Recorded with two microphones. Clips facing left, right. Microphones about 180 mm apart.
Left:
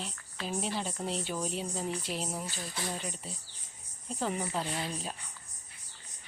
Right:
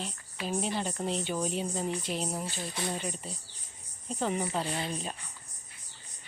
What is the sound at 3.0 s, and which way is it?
A woman's voice, centre (ahead or behind).